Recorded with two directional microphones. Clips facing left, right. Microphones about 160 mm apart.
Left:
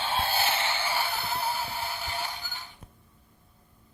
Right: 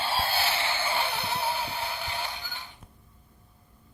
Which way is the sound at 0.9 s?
Centre (ahead or behind).